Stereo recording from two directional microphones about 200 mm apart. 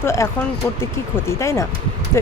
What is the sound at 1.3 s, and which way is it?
Speech, 15° left (ahead or behind).